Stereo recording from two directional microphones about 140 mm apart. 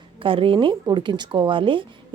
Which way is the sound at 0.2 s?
40° right (ahead or behind).